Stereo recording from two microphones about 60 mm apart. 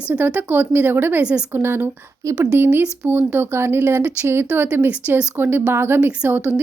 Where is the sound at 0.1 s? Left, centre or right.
Right.